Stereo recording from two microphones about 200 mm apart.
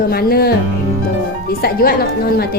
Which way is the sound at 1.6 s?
50° left (ahead or behind).